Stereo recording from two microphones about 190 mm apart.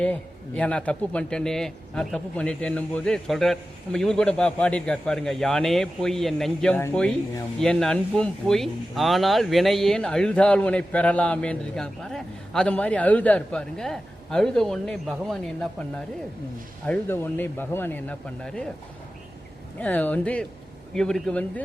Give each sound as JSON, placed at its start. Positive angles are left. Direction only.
{"t": 0.0, "sound": "speech", "side_deg": 5}
{"t": 19.8, "sound": "speech", "side_deg": 10}